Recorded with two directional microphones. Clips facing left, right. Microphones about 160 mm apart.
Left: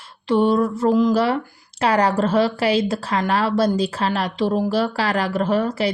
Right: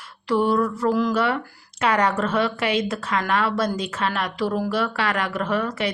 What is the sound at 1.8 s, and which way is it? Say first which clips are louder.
A woman's voice: left 3 dB; 30° left (ahead or behind).